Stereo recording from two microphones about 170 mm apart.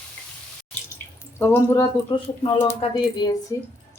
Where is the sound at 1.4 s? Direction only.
15° left (ahead or behind).